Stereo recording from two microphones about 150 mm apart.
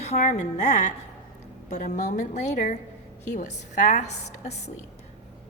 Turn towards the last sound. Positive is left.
turn(degrees=50)  # may be behind; listen again after turning